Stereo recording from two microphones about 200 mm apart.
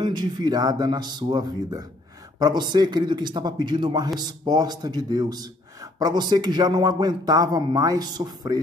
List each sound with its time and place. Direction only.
0.0 s speech: 20° right (ahead or behind)